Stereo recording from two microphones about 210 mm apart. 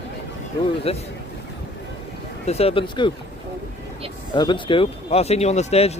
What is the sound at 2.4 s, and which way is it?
Speech, 30° left (ahead or behind).